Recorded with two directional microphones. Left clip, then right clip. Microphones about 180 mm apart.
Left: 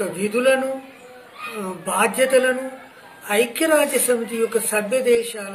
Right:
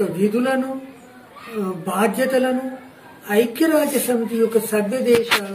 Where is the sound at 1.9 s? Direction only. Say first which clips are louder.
Left 2 dB; 10° right (ahead or behind).